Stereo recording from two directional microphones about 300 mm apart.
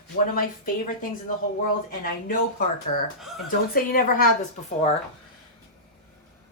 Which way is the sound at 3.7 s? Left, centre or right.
Left.